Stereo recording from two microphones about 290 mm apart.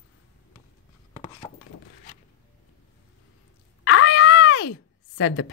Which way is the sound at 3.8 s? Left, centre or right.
Left.